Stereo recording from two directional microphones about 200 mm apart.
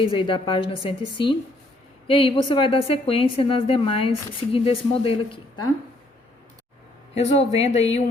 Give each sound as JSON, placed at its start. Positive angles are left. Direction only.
{"t": 0.0, "sound": "a woman's voice", "side_deg": 25}
{"t": 7.2, "sound": "speech", "side_deg": 30}